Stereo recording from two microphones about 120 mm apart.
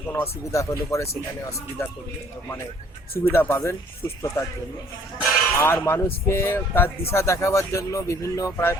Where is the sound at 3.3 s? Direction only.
20° left (ahead or behind).